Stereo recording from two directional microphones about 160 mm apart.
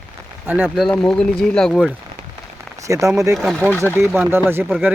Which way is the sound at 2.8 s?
20° right (ahead or behind).